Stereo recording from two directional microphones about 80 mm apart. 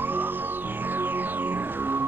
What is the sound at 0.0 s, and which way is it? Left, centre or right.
Music, right.